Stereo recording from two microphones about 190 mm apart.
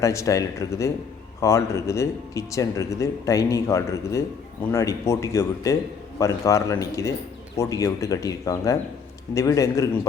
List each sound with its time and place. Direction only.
0.0 s speech: 15° left (ahead or behind)